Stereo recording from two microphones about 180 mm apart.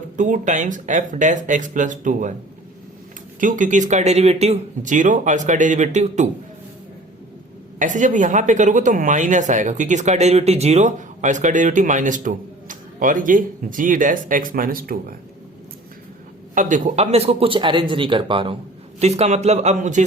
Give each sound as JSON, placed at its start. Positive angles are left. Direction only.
{"t": 0.2, "sound": "speech", "side_deg": -45}
{"t": 3.4, "sound": "speech", "side_deg": -45}
{"t": 7.8, "sound": "speech", "side_deg": -45}
{"t": 16.6, "sound": "speech", "side_deg": -45}